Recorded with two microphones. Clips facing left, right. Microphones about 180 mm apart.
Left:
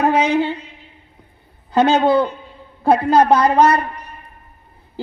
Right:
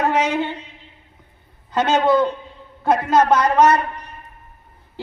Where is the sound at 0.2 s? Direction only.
35° left (ahead or behind).